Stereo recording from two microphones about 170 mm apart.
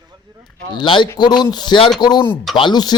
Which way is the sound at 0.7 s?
25° left (ahead or behind).